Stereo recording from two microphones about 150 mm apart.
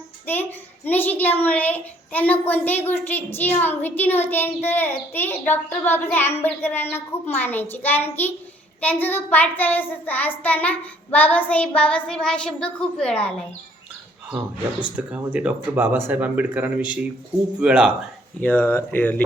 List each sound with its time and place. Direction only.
0.3 s a child's voice: 15° left (ahead or behind)
14.9 s speech: 10° right (ahead or behind)
18.3 s a child's voice: 10° left (ahead or behind)